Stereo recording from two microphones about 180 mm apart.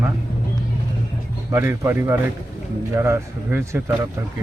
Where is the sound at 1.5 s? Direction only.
15° right (ahead or behind).